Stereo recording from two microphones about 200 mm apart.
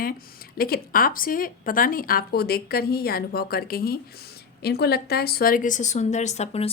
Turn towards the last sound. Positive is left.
turn(degrees=35)  # may be behind; listen again after turning